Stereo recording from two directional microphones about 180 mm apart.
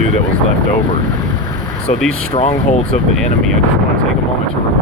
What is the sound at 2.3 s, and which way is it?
Speech, 35° left (ahead or behind).